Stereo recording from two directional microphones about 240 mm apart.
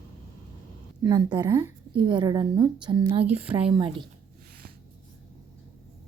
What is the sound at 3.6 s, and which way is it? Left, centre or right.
Speech, right.